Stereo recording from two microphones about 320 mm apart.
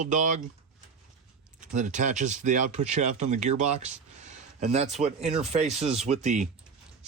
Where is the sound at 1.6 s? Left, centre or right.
Right.